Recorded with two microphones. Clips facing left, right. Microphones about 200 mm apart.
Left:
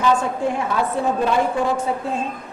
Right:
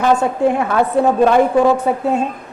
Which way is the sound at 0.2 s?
60° right (ahead or behind).